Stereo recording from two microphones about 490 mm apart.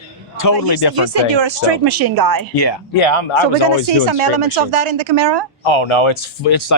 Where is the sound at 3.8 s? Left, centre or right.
Right.